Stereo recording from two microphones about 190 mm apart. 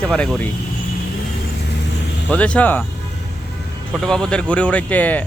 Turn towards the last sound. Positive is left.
turn(degrees=10)  # may be behind; listen again after turning